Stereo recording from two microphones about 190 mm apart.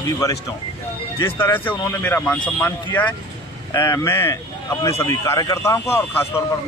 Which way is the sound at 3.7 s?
20° left (ahead or behind).